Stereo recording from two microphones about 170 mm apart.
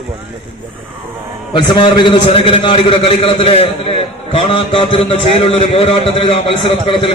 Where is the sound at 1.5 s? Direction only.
25° left (ahead or behind).